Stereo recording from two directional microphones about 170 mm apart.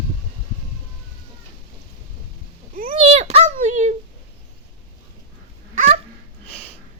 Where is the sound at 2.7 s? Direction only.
55° right (ahead or behind).